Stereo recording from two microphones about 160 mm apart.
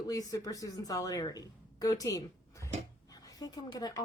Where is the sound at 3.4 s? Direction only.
25° left (ahead or behind).